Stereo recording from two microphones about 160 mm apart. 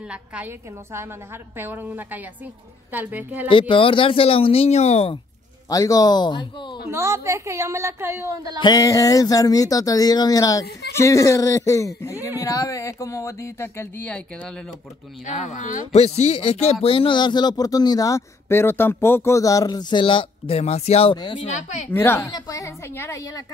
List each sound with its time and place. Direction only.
0.0 s a woman's voice: 5° right (ahead or behind)
3.4 s speech: 30° left (ahead or behind)
5.7 s speech: 20° left (ahead or behind)
6.9 s a woman's voice: 15° right (ahead or behind)
8.5 s speech: 25° left (ahead or behind); by 14.7 s 5° left (ahead or behind)
15.4 s speech: 50° left (ahead or behind); by 21.8 s 30° left (ahead or behind)
21.9 s speech: 15° left (ahead or behind)